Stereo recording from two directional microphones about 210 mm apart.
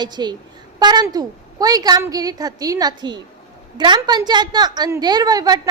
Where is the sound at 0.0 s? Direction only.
20° right (ahead or behind).